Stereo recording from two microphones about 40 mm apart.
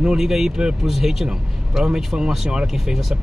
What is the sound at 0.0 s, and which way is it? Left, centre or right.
Speech, centre.